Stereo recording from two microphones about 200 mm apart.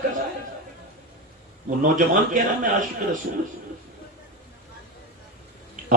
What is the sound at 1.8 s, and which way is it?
Speech, 40° right (ahead or behind).